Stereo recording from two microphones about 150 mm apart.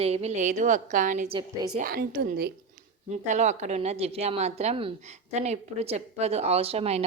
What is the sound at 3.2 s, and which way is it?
A woman's voice, 55° right (ahead or behind).